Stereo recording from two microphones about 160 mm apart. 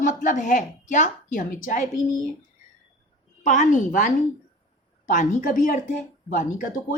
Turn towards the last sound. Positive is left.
turn(degrees=55)  # may be behind; listen again after turning